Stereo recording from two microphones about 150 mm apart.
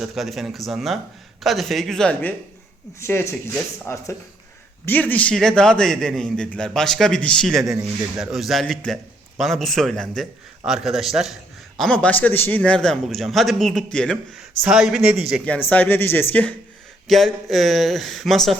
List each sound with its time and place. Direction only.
0.0 s a man's voice: centre (ahead or behind)
3.0 s a man's voice: 15° left (ahead or behind)
7.6 s speech: 20° right (ahead or behind)
8.2 s a man's voice: centre (ahead or behind)
15.4 s a man's voice: 10° left (ahead or behind)